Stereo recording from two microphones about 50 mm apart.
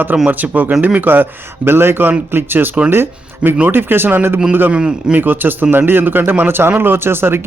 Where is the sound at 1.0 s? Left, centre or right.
Right.